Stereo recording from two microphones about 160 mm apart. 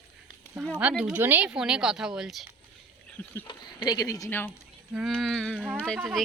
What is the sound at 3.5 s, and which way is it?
Speech, 25° left (ahead or behind).